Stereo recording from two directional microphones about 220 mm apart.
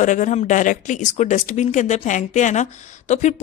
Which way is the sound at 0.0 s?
35° left (ahead or behind).